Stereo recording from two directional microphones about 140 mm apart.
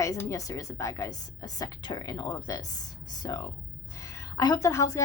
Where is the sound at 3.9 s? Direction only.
25° left (ahead or behind).